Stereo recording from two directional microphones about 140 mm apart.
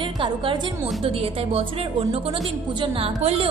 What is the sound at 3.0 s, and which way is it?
Speech, 45° right (ahead or behind).